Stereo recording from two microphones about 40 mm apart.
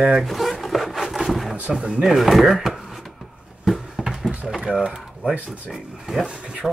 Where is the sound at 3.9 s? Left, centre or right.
Centre.